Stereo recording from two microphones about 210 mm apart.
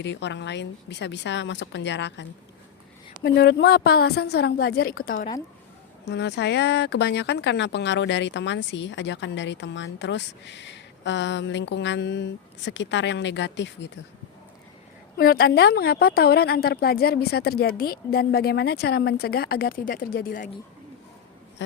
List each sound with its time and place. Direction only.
0.0 s speech: 55° left (ahead or behind)
3.2 s a woman's voice: 50° left (ahead or behind)
6.1 s speech: 55° left (ahead or behind)
15.2 s a woman's voice: 45° left (ahead or behind)